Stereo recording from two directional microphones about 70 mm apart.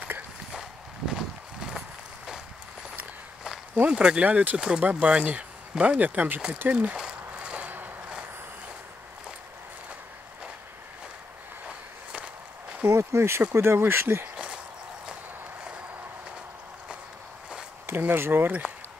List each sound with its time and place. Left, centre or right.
0.5 s walk: centre
3.7 s speech: right
6.7 s walk: centre
12.8 s speech: right
14.3 s a sound: centre
17.8 s speech: right